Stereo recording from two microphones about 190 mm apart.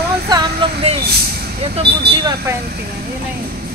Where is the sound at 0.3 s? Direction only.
20° right (ahead or behind).